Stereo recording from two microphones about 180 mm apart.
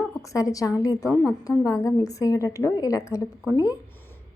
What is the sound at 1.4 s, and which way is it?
A woman's voice, 20° left (ahead or behind).